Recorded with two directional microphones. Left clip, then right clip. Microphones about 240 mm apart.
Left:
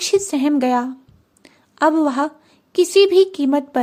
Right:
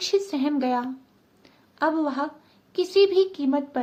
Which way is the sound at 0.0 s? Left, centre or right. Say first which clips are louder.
Left 6 dB; left.